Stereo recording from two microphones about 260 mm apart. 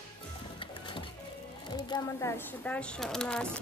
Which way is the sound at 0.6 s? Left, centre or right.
Centre.